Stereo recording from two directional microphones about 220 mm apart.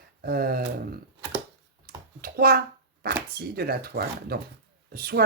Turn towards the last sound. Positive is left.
turn(degrees=-45)  # may be behind; listen again after turning